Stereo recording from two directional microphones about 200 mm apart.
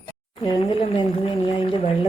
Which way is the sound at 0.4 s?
25° left (ahead or behind).